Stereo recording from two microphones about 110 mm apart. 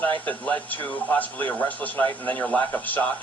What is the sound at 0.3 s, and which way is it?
Speech, 15° left (ahead or behind).